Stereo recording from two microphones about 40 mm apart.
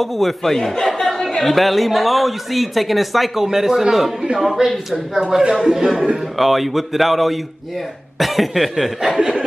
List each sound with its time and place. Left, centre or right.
0.0 s speech: centre
3.4 s a man's voice: centre
9.0 s a man's voice: centre